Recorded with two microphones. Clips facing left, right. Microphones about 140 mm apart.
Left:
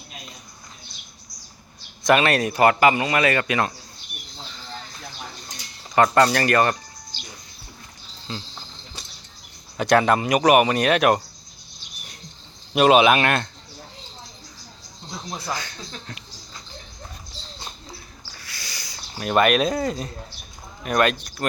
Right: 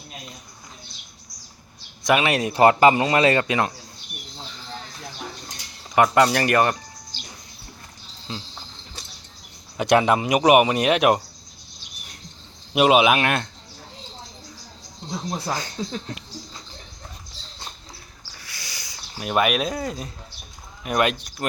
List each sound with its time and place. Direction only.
2.0 s speech: 10° right (ahead or behind)
2.4 s speech: 25° right (ahead or behind)
5.9 s speech: 10° right (ahead or behind)
7.1 s music: 45° right (ahead or behind)
8.3 s speech: 15° right (ahead or behind)
9.7 s speech: 15° right (ahead or behind)
12.7 s speech: 10° right (ahead or behind)
15.3 s speech: 35° right (ahead or behind)
18.3 s owl: 15° right (ahead or behind)
19.2 s speech: 5° right (ahead or behind)
20.8 s speech: 15° right (ahead or behind)